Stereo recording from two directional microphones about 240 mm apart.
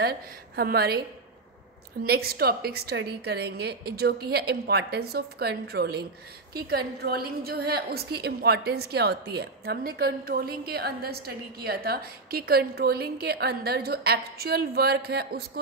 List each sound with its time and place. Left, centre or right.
0.0 s a woman's voice: right
2.0 s a woman's voice: right